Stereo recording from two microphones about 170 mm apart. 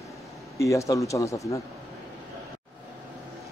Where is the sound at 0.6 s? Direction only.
20° left (ahead or behind).